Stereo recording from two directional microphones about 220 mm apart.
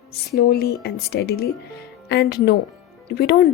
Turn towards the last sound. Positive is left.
turn(degrees=45)  # may be behind; listen again after turning